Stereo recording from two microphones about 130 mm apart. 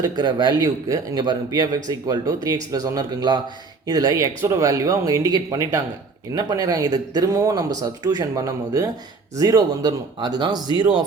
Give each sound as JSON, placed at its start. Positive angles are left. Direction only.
{"t": 0.0, "sound": "a man's voice", "side_deg": -35}